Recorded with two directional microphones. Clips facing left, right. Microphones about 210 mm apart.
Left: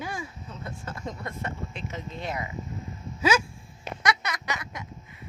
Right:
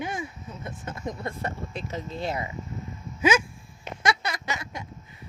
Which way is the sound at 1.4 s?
35° right (ahead or behind).